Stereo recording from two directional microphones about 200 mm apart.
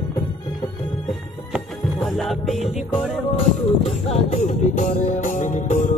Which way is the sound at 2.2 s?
Centre (ahead or behind).